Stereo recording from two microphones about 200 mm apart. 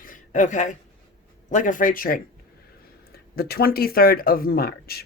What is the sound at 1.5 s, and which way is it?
Speech, 40° left (ahead or behind).